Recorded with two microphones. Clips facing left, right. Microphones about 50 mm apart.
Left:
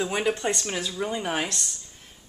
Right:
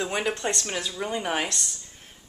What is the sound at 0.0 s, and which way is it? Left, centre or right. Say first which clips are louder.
Speech: left 2 dB; centre.